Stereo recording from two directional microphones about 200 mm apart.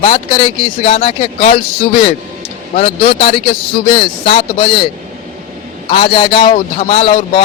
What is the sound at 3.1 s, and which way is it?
Speech, 25° left (ahead or behind).